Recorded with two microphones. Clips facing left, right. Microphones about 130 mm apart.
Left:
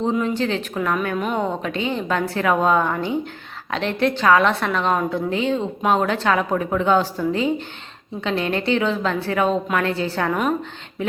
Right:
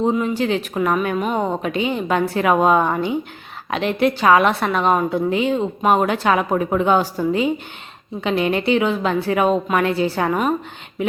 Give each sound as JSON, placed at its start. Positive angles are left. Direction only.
{"t": 0.0, "sound": "a woman's voice", "side_deg": -10}